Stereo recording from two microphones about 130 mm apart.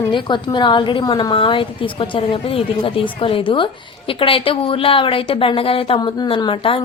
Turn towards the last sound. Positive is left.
turn(degrees=40)  # may be behind; listen again after turning